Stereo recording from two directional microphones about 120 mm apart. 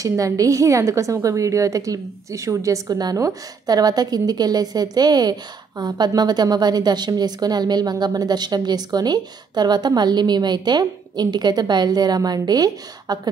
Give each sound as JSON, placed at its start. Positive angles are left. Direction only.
{"t": 0.0, "sound": "a woman's voice", "side_deg": -30}